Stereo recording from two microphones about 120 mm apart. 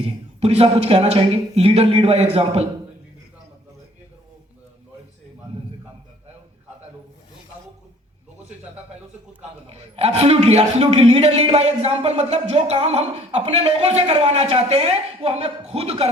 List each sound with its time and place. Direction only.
0.0 s a man's voice: 65° right (ahead or behind)
9.6 s a man's voice: 60° right (ahead or behind)